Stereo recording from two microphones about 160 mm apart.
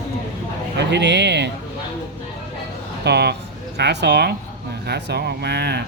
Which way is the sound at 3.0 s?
90° right.